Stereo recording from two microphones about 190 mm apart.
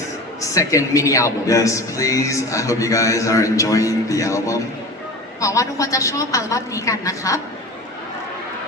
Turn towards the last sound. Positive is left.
turn(degrees=15)  # may be behind; listen again after turning